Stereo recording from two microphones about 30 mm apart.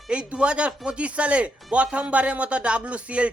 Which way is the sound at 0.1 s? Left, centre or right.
Right.